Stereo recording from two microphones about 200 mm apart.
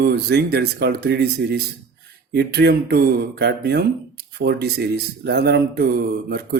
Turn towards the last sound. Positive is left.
turn(degrees=-55)  # may be behind; listen again after turning